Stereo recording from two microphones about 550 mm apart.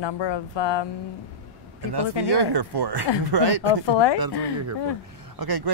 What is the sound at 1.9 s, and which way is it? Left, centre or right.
Speech, right.